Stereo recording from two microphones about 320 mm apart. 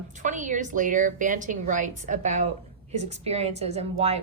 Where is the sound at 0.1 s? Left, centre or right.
Right.